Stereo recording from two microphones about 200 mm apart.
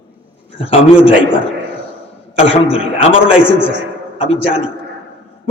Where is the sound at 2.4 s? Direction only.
30° left (ahead or behind).